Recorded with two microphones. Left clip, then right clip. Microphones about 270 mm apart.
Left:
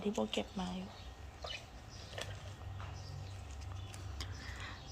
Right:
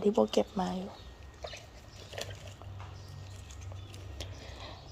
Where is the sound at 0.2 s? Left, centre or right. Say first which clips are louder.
Right 10 dB; right.